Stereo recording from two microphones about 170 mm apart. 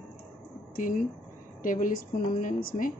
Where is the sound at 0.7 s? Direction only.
50° left (ahead or behind).